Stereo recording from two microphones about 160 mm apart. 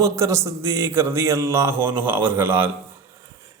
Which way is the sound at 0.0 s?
20° right (ahead or behind).